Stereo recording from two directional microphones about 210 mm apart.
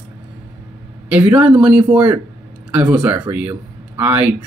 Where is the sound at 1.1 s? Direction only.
10° right (ahead or behind).